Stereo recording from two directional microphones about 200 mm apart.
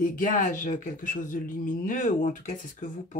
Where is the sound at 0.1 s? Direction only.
40° left (ahead or behind).